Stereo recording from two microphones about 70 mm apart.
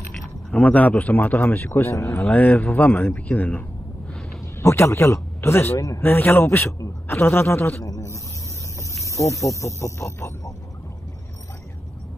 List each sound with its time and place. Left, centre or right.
0.5 s a man's voice: centre
1.9 s a man's voice: left
2.1 s a man's voice: left
4.6 s speech: left
5.8 s speech: left
6.0 s a man's voice: left
7.8 s speech: left